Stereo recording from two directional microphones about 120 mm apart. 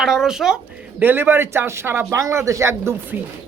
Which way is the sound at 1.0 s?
20° right (ahead or behind).